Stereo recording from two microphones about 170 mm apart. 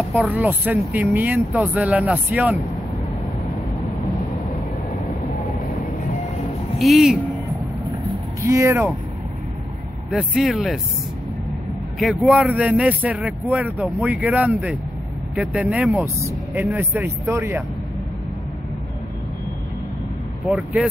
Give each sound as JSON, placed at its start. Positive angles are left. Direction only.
{"t": 0.1, "sound": "speech", "side_deg": -10}
{"t": 6.8, "sound": "speech", "side_deg": 0}
{"t": 8.4, "sound": "speech", "side_deg": -15}
{"t": 10.1, "sound": "speech", "side_deg": -5}
{"t": 12.0, "sound": "speech", "side_deg": 0}
{"t": 20.4, "sound": "speech", "side_deg": -5}